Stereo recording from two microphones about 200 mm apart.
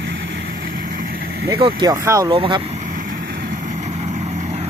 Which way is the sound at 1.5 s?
25° right (ahead or behind).